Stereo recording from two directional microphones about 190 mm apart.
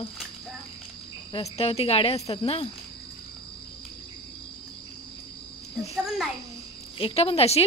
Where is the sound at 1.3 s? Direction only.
30° left (ahead or behind).